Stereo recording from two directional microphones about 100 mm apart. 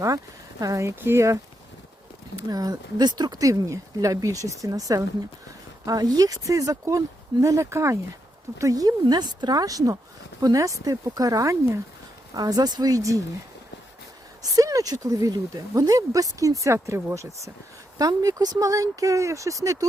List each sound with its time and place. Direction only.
0.6 s speech: 30° right (ahead or behind)
2.5 s speech: 40° right (ahead or behind)
14.5 s speech: 35° right (ahead or behind)